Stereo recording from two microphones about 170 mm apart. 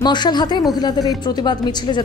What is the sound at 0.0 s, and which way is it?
A woman's voice, 25° left (ahead or behind).